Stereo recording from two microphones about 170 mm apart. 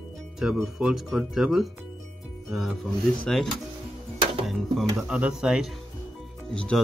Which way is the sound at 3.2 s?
Centre (ahead or behind).